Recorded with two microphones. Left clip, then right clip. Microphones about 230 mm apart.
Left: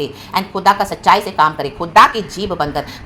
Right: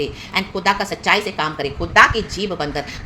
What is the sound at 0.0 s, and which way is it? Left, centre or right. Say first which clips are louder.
A woman's voice: left 2 dB; centre.